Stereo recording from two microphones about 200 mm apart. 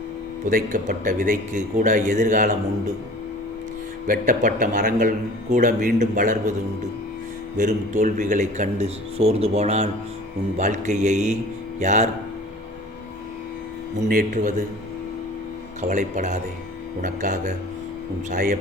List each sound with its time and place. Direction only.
0.5 s speech: 40° right (ahead or behind)
4.0 s speech: 45° right (ahead or behind)
7.5 s speech: 40° right (ahead or behind)
14.1 s a man's voice: 45° right (ahead or behind)
15.8 s a man's voice: 40° right (ahead or behind)